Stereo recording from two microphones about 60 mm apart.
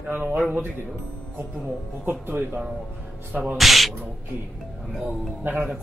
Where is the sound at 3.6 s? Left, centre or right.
Centre.